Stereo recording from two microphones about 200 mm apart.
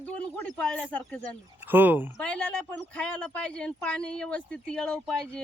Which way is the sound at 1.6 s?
10° right (ahead or behind).